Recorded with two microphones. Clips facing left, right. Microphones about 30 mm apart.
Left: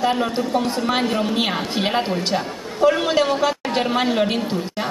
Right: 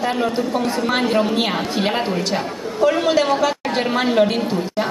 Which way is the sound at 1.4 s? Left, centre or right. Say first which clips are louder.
Right 1 dB; centre.